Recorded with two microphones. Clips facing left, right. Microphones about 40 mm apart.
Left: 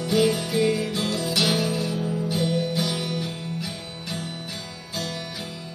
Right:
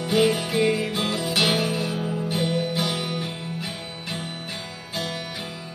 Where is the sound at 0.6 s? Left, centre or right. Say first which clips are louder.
Even; right.